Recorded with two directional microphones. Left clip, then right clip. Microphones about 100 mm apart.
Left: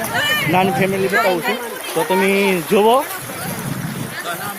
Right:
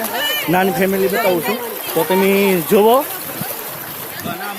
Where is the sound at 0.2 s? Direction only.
30° right (ahead or behind).